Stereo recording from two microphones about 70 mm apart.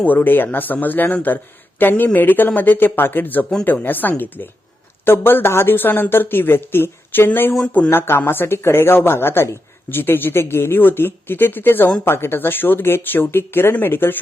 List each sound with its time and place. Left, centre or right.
0.0 s speech: left
7.6 s speech: left